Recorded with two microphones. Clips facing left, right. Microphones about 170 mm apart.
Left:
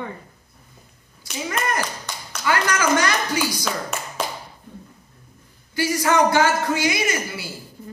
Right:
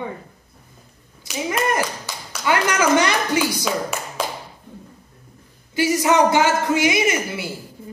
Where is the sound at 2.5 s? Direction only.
20° right (ahead or behind).